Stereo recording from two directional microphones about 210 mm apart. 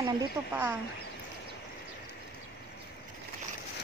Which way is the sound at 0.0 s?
15° right (ahead or behind).